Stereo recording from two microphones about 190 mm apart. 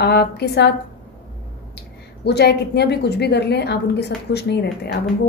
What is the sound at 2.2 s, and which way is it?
A woman's voice, 60° left (ahead or behind).